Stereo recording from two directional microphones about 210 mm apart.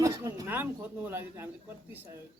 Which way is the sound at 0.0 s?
15° right (ahead or behind).